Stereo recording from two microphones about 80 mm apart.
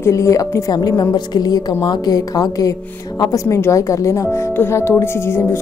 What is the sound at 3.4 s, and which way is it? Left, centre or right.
Speech, left.